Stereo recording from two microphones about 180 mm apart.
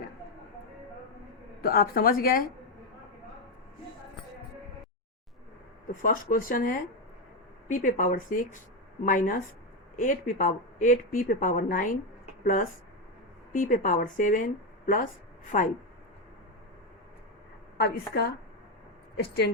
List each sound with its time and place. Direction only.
1.6 s a woman's voice: 55° left (ahead or behind)
5.9 s speech: 50° left (ahead or behind)
13.5 s speech: 45° left (ahead or behind)
17.7 s a woman's voice: 60° left (ahead or behind)